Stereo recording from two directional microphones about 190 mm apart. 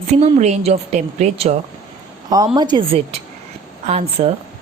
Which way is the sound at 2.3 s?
20° right (ahead or behind).